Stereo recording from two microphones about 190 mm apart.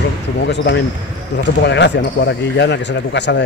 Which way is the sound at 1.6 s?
65° left (ahead or behind).